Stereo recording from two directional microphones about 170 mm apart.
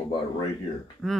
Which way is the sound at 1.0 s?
Centre (ahead or behind).